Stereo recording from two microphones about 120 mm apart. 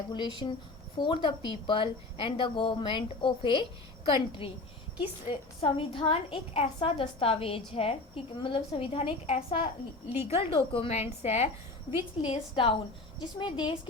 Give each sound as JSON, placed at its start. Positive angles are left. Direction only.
{"t": 0.1, "sound": "a woman's voice", "side_deg": 40}
{"t": 11.9, "sound": "a woman's voice", "side_deg": 50}